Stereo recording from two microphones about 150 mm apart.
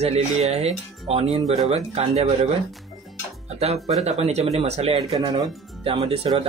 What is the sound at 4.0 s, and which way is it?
Speech, 45° right (ahead or behind).